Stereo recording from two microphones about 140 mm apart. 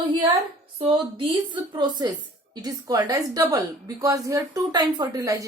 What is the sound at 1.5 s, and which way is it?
A woman's voice, 30° right (ahead or behind).